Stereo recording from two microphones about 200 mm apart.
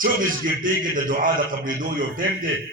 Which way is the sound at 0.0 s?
45° right (ahead or behind).